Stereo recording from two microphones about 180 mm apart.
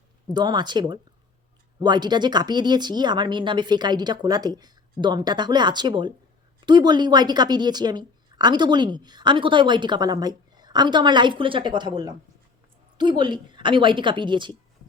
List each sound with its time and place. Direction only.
0.3 s a woman's voice: 25° right (ahead or behind)